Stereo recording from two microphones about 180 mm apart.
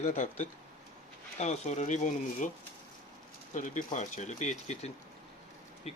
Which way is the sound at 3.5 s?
45° left (ahead or behind).